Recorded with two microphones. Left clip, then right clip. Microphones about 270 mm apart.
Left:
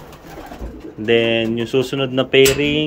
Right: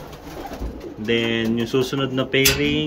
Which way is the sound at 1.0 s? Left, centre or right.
Centre.